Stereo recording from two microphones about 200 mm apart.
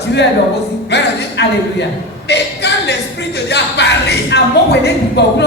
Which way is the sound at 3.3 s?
55° left (ahead or behind).